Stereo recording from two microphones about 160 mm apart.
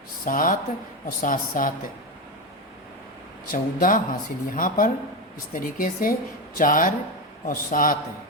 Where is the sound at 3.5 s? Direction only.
60° left (ahead or behind).